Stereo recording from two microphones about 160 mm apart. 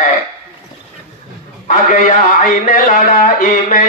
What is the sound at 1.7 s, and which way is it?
Speech, 55° left (ahead or behind).